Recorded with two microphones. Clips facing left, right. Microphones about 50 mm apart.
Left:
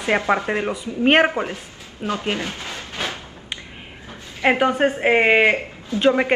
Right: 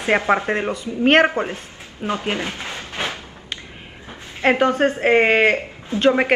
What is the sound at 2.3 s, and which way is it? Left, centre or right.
Speech, right.